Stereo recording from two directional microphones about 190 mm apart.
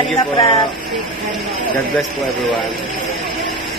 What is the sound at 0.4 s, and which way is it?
Speech, 30° left (ahead or behind).